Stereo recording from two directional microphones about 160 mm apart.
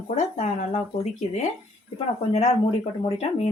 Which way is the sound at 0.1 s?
45° left (ahead or behind).